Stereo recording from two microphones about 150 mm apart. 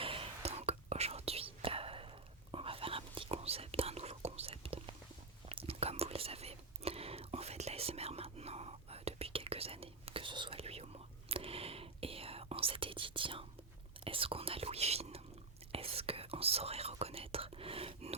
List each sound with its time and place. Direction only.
0.0 s whispering: 35° right (ahead or behind)